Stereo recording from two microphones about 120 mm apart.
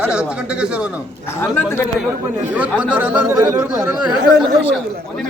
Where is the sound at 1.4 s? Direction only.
20° left (ahead or behind).